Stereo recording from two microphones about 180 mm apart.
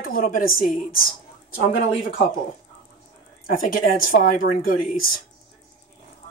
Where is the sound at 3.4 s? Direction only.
50° left (ahead or behind).